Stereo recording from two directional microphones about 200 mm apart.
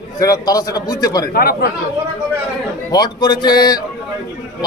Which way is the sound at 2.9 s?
20° left (ahead or behind).